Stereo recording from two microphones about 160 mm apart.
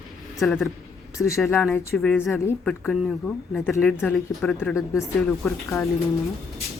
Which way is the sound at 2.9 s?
Centre (ahead or behind).